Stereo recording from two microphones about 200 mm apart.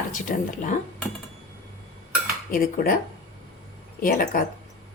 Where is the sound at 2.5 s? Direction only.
45° left (ahead or behind).